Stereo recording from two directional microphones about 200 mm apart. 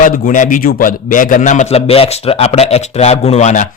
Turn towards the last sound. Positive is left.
turn(degrees=35)  # may be behind; listen again after turning